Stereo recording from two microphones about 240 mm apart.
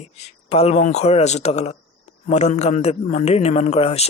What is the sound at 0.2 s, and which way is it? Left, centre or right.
Speech, left.